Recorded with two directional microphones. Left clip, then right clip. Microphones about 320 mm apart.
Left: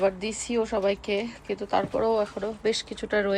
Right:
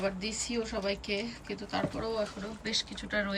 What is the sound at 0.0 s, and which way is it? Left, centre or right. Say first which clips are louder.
Speech: left 8 dB; centre.